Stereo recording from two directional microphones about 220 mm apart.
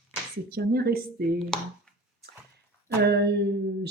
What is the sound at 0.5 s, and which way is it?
Speech, 45° right (ahead or behind).